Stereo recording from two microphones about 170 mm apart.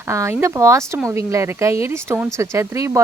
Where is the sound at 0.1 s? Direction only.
15° right (ahead or behind).